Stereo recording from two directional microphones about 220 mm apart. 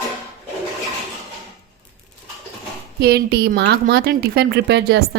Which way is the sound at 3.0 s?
45° right (ahead or behind).